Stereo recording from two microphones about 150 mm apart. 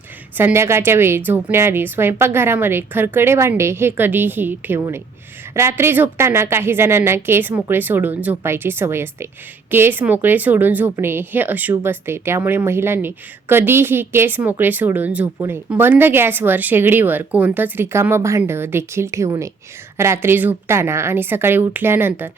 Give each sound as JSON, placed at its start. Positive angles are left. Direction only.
{"t": 0.3, "sound": "a woman's voice", "side_deg": -15}